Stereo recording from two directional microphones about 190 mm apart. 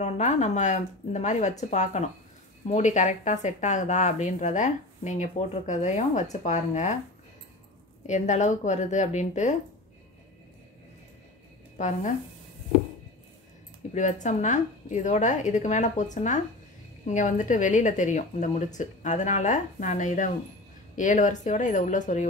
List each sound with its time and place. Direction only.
0.0 s speech: 40° left (ahead or behind)
8.1 s speech: 40° left (ahead or behind)
11.8 s speech: 40° left (ahead or behind)
13.9 s speech: 40° left (ahead or behind)